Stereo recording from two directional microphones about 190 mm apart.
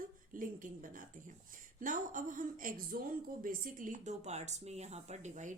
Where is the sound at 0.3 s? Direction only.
45° right (ahead or behind).